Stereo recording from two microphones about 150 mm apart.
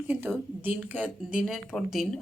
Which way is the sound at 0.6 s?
10° right (ahead or behind).